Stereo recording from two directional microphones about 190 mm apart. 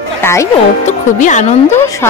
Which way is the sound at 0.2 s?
15° left (ahead or behind).